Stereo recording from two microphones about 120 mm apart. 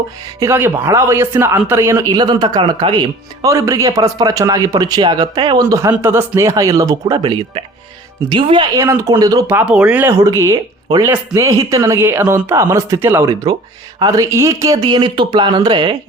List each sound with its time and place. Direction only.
0.3 s speech: 20° right (ahead or behind)
7.2 s speech: 50° right (ahead or behind)
8.7 s speech: 25° right (ahead or behind)
9.6 s speech: 10° right (ahead or behind)
10.1 s speech: 25° right (ahead or behind); by 16.0 s 40° right (ahead or behind)